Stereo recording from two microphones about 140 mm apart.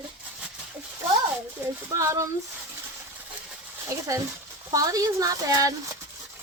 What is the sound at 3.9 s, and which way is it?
Speech, 20° right (ahead or behind).